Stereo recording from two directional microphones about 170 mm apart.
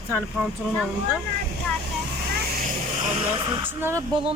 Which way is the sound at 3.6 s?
15° right (ahead or behind).